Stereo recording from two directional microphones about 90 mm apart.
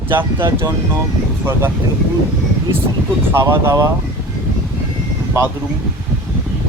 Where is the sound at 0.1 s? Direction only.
25° right (ahead or behind).